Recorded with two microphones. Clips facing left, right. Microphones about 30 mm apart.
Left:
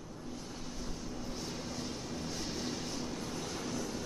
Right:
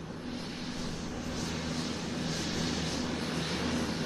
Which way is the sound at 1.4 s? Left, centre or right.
Right.